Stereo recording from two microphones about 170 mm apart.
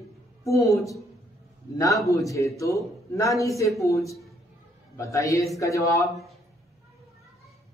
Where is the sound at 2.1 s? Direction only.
20° left (ahead or behind).